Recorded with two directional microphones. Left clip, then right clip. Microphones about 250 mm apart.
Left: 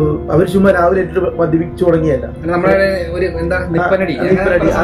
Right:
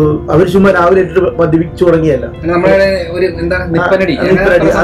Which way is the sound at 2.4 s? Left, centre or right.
Left.